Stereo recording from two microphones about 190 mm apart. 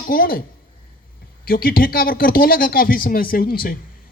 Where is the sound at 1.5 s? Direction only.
50° left (ahead or behind).